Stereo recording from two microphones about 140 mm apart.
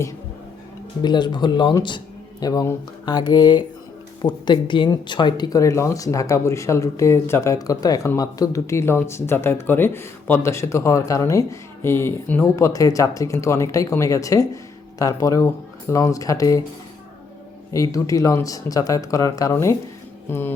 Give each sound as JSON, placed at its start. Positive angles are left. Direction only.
{"t": 1.0, "sound": "speech", "side_deg": 30}
{"t": 17.7, "sound": "speech", "side_deg": 25}